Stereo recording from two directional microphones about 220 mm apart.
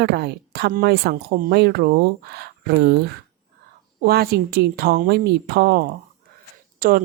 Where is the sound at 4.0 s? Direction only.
45° right (ahead or behind).